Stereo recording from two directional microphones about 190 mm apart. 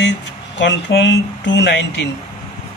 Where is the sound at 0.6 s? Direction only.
70° left (ahead or behind).